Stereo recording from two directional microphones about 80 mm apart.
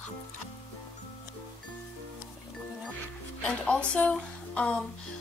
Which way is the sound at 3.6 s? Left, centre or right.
Centre.